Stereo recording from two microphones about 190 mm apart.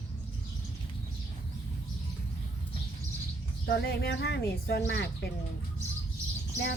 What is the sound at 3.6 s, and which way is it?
Speech, 60° left (ahead or behind).